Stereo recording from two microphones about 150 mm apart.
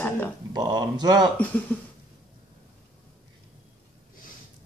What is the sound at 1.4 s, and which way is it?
Speech, 10° left (ahead or behind).